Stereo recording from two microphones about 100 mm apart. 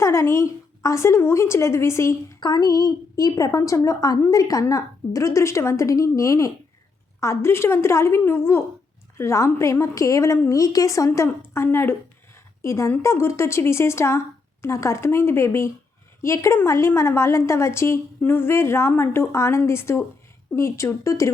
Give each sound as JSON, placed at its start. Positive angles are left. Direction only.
{"t": 0.0, "sound": "a woman's voice", "side_deg": 30}
{"t": 2.4, "sound": "a woman's voice", "side_deg": 40}